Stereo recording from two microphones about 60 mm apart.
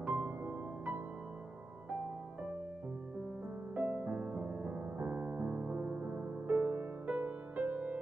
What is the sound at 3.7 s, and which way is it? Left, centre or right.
Music, right.